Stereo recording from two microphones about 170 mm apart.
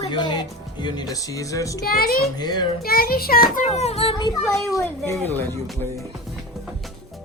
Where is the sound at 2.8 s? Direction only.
60° left (ahead or behind).